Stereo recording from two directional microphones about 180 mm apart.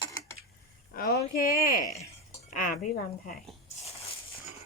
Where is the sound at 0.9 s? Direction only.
55° left (ahead or behind).